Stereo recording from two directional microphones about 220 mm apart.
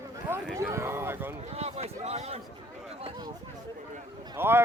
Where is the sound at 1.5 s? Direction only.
30° right (ahead or behind).